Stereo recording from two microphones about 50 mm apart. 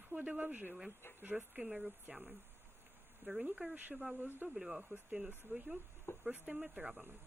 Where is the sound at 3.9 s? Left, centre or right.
Centre.